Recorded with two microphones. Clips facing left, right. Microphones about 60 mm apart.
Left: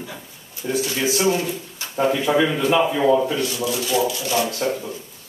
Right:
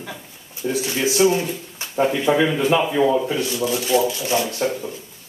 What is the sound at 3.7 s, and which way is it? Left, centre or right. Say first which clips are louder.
Speech: right 3 dB; right.